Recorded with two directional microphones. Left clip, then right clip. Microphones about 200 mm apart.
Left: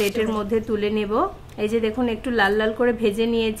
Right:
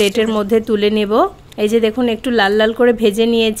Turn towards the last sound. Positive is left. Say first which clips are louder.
# right 8 dB
turn(degrees=-40)  # may be behind; listen again after turning